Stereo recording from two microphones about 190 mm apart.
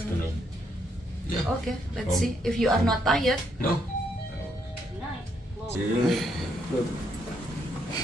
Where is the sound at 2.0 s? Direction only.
Centre (ahead or behind).